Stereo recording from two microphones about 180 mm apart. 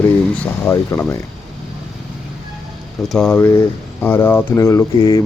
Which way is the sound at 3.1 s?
5° left (ahead or behind).